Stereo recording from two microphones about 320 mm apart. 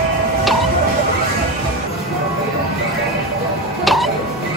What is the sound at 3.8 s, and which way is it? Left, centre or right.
Music, centre.